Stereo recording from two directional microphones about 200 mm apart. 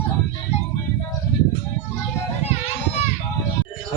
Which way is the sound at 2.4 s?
30° left (ahead or behind).